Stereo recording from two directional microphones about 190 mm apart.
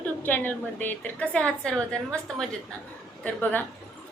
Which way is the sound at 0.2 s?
10° left (ahead or behind).